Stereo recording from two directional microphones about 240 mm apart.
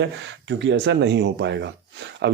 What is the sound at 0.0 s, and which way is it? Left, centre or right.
Speech, right.